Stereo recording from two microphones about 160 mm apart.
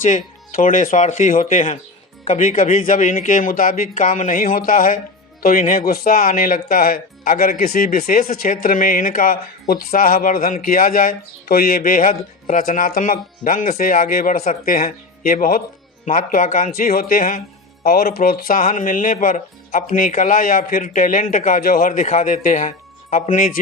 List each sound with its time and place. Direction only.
0.0 s speech: 50° left (ahead or behind)